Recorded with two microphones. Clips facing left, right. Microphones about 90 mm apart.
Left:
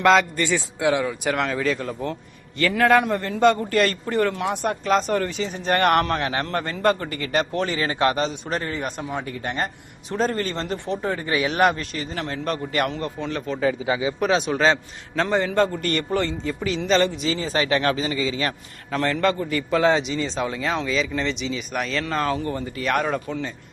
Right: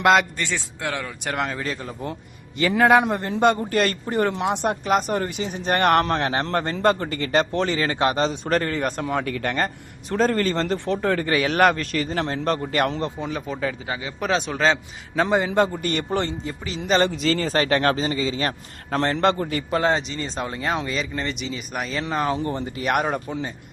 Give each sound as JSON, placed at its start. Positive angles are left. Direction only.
{"t": 0.0, "sound": "a man's voice", "side_deg": 0}
{"t": 2.6, "sound": "a man's voice", "side_deg": -15}
{"t": 7.9, "sound": "speech", "side_deg": -25}
{"t": 8.4, "sound": "speech", "side_deg": -55}
{"t": 10.1, "sound": "a man's voice", "side_deg": -45}
{"t": 11.0, "sound": "speech", "side_deg": -70}
{"t": 11.3, "sound": "a man's voice", "side_deg": -50}
{"t": 13.0, "sound": "a man's voice", "side_deg": -15}
{"t": 13.6, "sound": "a man's voice", "side_deg": 5}
{"t": 15.2, "sound": "a man's voice", "side_deg": -10}
{"t": 17.1, "sound": "a man's voice", "side_deg": -55}
{"t": 20.6, "sound": "a man's voice", "side_deg": -10}
{"t": 21.9, "sound": "a man's voice", "side_deg": -15}